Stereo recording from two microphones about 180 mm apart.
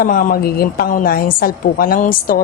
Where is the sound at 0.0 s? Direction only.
50° left (ahead or behind).